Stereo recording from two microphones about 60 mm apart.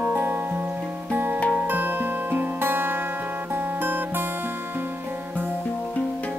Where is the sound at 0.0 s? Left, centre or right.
Right.